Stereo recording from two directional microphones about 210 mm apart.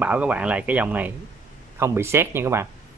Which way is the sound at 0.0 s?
5° right (ahead or behind).